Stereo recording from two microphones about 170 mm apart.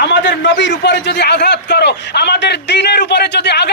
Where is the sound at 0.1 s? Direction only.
90° left.